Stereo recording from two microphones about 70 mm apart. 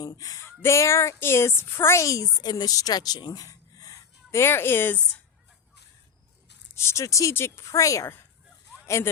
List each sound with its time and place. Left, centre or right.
0.2 s speech: left
0.6 s a woman's voice: left
2.4 s speech: left
3.4 s a sound: left
4.3 s a woman's voice: left
6.7 s speech: left